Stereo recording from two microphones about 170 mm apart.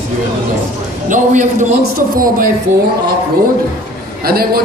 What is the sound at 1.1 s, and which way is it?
Speech, 50° right (ahead or behind).